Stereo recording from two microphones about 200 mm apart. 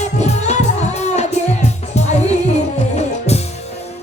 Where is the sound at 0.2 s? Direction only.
35° left (ahead or behind).